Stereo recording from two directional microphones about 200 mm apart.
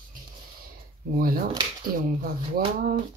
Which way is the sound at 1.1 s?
45° right (ahead or behind).